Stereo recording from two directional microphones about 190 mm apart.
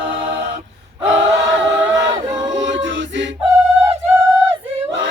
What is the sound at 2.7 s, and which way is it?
Chant, 75° right (ahead or behind).